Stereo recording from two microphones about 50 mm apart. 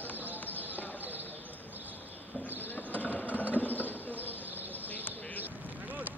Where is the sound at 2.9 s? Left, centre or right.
Left.